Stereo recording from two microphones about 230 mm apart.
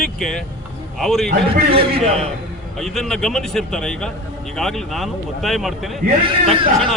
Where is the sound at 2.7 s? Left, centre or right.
Centre.